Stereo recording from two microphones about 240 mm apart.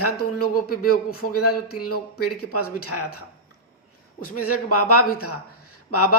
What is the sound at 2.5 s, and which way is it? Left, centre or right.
Speech, left.